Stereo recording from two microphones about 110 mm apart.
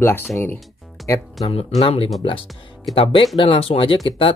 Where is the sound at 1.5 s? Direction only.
65° left (ahead or behind).